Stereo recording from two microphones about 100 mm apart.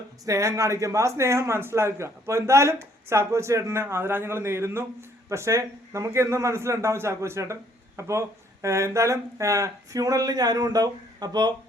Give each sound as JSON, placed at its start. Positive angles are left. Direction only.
{"t": 0.3, "sound": "speech", "side_deg": -30}